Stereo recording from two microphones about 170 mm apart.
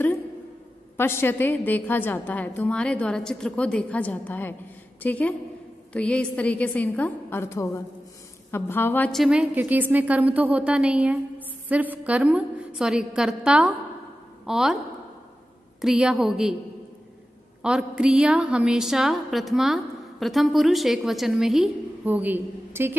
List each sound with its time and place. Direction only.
0.9 s a woman's voice: 15° left (ahead or behind); by 14.8 s centre (ahead or behind)
15.8 s a woman's voice: 5° right (ahead or behind)
17.6 s a woman's voice: 5° right (ahead or behind)